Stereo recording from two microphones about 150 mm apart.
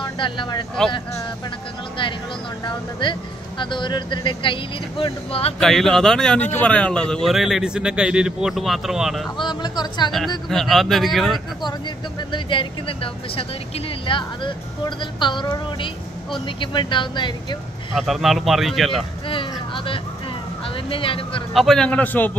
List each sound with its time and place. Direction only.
0.0 s speech: 30° left (ahead or behind)
0.8 s speech: 5° left (ahead or behind)
2.6 s speech: 30° left (ahead or behind)
5.6 s speech: 5° left (ahead or behind)
9.4 s speech: 30° left (ahead or behind)
10.5 s speech: centre (ahead or behind)
12.3 s speech: 35° left (ahead or behind)
17.9 s speech: centre (ahead or behind)
19.2 s a sound: 35° left (ahead or behind)
20.7 s speech: 35° left (ahead or behind)
21.5 s a man's voice: 5° left (ahead or behind)